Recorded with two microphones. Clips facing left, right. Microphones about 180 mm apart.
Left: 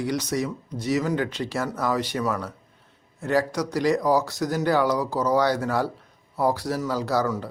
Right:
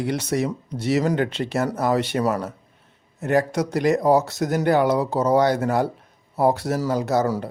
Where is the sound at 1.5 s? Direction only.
20° right (ahead or behind).